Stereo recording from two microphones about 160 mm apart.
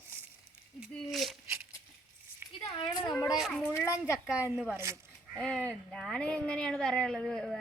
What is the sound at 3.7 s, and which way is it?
Speech, 15° left (ahead or behind).